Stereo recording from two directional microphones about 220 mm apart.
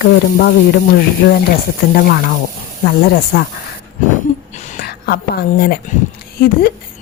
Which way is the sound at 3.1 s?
40° left (ahead or behind).